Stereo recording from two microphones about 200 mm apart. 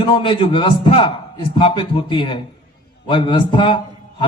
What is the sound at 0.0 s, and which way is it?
A man's voice, 25° left (ahead or behind).